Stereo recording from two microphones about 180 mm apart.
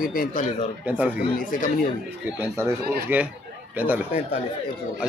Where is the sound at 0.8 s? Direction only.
10° right (ahead or behind).